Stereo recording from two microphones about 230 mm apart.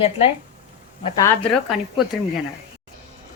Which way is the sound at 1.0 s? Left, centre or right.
Centre.